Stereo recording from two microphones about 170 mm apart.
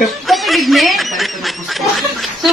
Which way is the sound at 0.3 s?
Centre (ahead or behind).